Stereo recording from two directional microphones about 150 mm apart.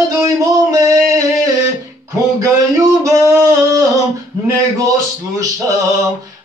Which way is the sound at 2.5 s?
20° right (ahead or behind).